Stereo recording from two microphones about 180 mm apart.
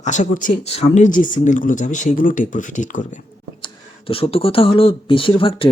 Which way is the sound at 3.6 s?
30° left (ahead or behind).